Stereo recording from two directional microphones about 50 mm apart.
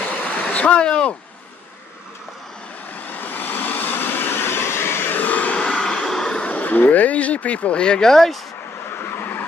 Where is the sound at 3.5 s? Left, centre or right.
Left.